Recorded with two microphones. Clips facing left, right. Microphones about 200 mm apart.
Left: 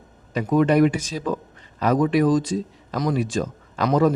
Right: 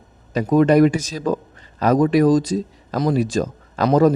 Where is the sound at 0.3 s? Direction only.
40° right (ahead or behind).